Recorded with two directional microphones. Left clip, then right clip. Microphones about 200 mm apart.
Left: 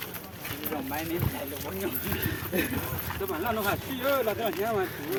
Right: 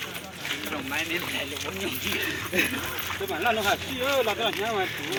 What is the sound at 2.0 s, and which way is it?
Speech, 40° left (ahead or behind).